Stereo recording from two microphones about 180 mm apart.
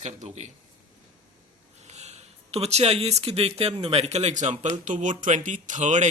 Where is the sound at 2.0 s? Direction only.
35° right (ahead or behind).